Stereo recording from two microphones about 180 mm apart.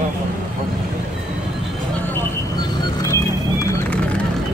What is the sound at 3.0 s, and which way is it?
Music, 20° left (ahead or behind).